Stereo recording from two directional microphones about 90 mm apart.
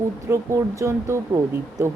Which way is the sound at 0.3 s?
25° right (ahead or behind).